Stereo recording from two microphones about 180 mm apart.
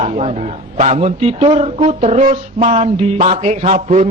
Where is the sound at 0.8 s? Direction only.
40° right (ahead or behind).